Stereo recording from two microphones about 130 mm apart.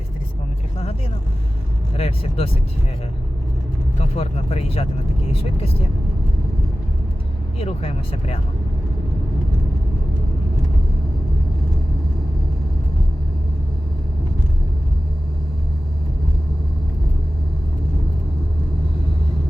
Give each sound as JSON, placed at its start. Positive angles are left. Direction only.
{"t": 2.0, "sound": "speech", "side_deg": 50}
{"t": 3.9, "sound": "speech", "side_deg": 55}
{"t": 7.6, "sound": "speech", "side_deg": 50}